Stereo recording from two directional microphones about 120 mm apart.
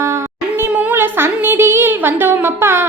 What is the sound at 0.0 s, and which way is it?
A child's voice, 25° right (ahead or behind).